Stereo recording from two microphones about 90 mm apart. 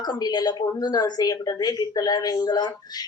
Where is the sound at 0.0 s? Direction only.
50° left (ahead or behind).